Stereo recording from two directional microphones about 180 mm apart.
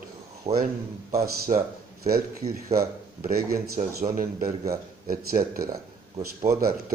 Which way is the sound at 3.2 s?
50° right (ahead or behind).